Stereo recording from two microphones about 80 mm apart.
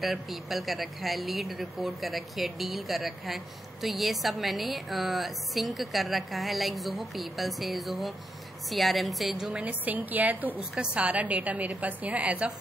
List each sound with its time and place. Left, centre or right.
0.0 s speech: centre
9.6 s a woman's voice: centre